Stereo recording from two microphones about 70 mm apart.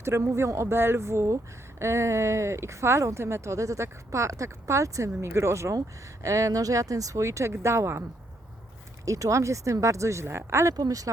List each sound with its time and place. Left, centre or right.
0.0 s speech: right
9.0 s speech: right
10.8 s speech: right